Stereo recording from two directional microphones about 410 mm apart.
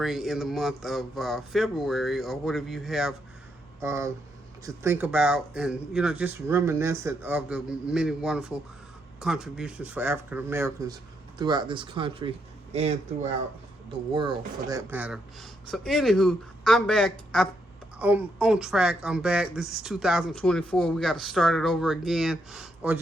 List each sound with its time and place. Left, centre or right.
0.0 s speech: centre
14.1 s speech: centre